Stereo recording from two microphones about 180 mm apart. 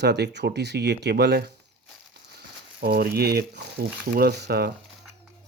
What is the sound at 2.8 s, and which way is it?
Speech, 60° right (ahead or behind).